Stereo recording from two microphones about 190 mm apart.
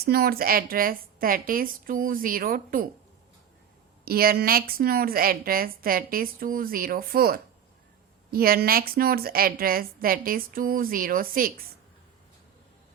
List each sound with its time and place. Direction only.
0.0 s a woman's voice: 55° right (ahead or behind)
4.0 s a woman's voice: 55° right (ahead or behind)